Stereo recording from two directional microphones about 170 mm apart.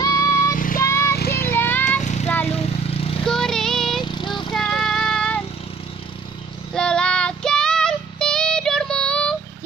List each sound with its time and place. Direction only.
0.0 s vehicle: 20° left (ahead or behind)
0.5 s vehicle: 55° left (ahead or behind)
0.8 s vehicle: 15° left (ahead or behind)
1.1 s children playing: 65° left (ahead or behind)
1.5 s vehicle: 10° left (ahead or behind)
2.0 s vehicle: 45° left (ahead or behind)
2.2 s vehicle: 10° left (ahead or behind)
2.8 s vehicle: 35° left (ahead or behind)
3.2 s a sound: 5° left (ahead or behind)
4.0 s vehicle: 30° left (ahead or behind)
4.5 s vehicle: 5° left (ahead or behind)
6.7 s child singing: 5° left (ahead or behind)